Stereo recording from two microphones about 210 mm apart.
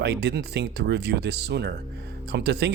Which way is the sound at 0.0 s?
55° right (ahead or behind).